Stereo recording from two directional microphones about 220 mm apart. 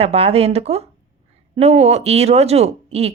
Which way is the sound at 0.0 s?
25° right (ahead or behind).